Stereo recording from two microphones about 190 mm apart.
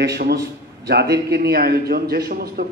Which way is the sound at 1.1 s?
55° right (ahead or behind).